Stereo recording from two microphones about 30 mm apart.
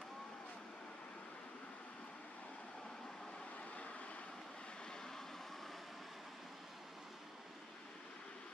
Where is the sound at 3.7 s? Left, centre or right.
Left.